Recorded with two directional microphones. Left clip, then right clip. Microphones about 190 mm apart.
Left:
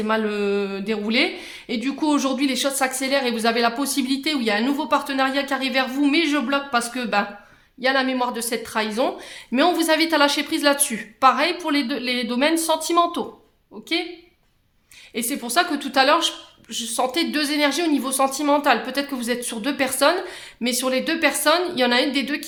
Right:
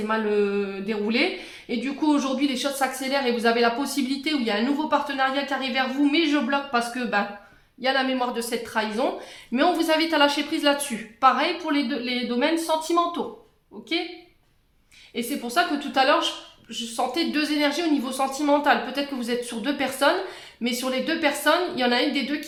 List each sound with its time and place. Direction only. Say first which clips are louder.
0.1 s speech: left 1 dB; 45° left (ahead or behind)
15.1 s speech: left 3 dB; 40° left (ahead or behind)